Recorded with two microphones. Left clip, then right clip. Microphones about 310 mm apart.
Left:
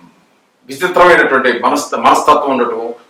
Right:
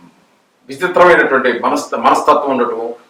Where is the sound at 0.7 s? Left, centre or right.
Centre.